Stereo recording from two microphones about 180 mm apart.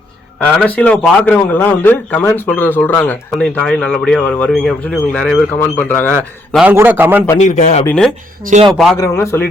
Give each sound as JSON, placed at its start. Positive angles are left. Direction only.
{"t": 0.4, "sound": "a man's voice", "side_deg": 5}
{"t": 6.5, "sound": "a man's voice", "side_deg": -5}
{"t": 7.3, "sound": "speech", "side_deg": 40}
{"t": 7.9, "sound": "a man's voice", "side_deg": 5}
{"t": 8.4, "sound": "speech", "side_deg": -50}
{"t": 9.0, "sound": "a man's voice", "side_deg": 15}